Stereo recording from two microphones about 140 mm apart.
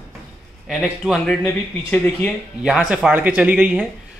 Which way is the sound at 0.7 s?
5° right (ahead or behind).